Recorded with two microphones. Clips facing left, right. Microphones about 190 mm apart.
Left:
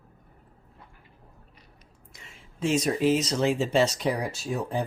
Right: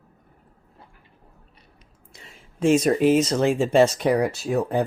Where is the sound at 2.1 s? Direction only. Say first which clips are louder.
Right 4 dB; 30° right (ahead or behind).